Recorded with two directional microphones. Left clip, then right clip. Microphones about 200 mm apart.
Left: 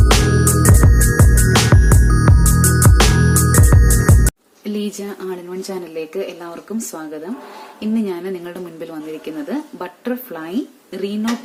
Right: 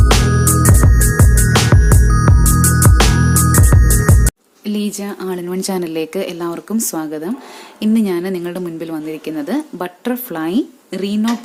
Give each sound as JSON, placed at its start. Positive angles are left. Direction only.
{"t": 0.0, "sound": "music", "side_deg": 0}
{"t": 4.6, "sound": "a sound", "side_deg": -25}
{"t": 5.3, "sound": "a woman's voice", "side_deg": -45}